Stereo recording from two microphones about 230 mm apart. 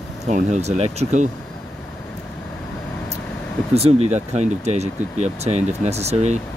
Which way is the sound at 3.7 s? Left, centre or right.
Right.